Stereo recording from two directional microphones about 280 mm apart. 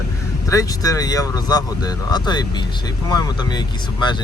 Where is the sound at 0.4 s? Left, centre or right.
Centre.